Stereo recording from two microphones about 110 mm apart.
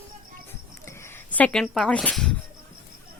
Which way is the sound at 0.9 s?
25° left (ahead or behind).